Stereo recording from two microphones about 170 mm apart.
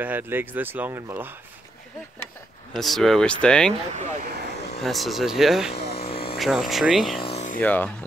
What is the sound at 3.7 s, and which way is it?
Speech, 40° right (ahead or behind).